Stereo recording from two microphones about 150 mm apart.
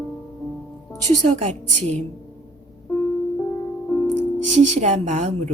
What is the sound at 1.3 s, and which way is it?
Speech, 45° right (ahead or behind).